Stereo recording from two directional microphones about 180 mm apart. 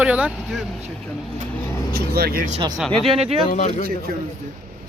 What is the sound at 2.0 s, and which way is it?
Speech, 60° right (ahead or behind).